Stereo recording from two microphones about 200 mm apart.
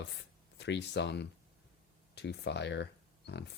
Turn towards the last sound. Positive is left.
turn(degrees=55)  # may be behind; listen again after turning